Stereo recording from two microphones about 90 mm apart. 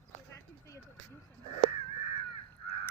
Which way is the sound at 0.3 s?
35° left (ahead or behind).